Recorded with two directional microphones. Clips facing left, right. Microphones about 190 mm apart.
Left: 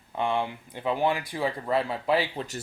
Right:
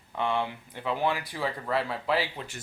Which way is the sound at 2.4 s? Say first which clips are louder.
Left 6 dB; 35° left (ahead or behind).